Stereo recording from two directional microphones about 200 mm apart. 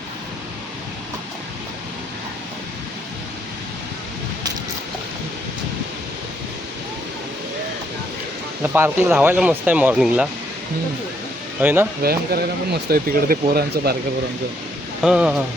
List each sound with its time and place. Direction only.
8.6 s speech: 10° right (ahead or behind)
11.6 s speech: 10° right (ahead or behind)
12.0 s speech: 50° right (ahead or behind)
15.0 s speech: 5° right (ahead or behind)